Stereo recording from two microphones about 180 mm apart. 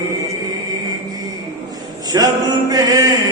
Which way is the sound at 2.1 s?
20° right (ahead or behind).